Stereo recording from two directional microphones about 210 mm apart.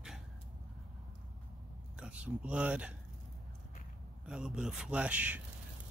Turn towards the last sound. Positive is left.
turn(degrees=-5)  # may be behind; listen again after turning